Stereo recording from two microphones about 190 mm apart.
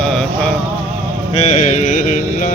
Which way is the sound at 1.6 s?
40° left (ahead or behind).